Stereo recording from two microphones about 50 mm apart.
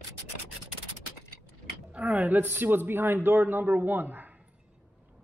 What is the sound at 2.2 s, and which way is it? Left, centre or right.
A man's voice, right.